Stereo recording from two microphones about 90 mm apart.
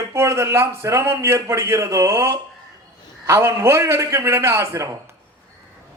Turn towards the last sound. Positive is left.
turn(degrees=-30)  # may be behind; listen again after turning